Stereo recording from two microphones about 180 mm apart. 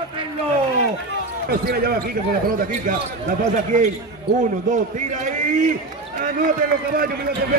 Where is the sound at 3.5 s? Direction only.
45° right (ahead or behind).